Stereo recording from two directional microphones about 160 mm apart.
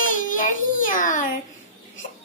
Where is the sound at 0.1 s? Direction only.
55° left (ahead or behind).